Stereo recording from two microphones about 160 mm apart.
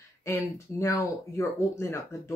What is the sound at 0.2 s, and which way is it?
Speech, 15° left (ahead or behind).